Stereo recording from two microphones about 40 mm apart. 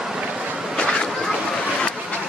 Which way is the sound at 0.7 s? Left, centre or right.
Centre.